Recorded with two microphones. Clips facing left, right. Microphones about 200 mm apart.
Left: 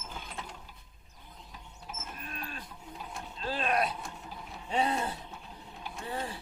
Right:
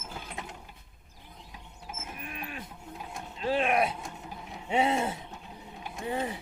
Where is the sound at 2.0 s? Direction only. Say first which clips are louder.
Right 2 dB; 15° right (ahead or behind).